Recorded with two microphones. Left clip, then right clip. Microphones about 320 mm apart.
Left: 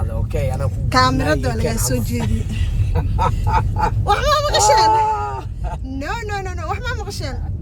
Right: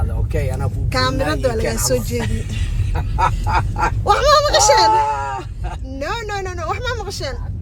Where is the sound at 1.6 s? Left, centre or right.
Right.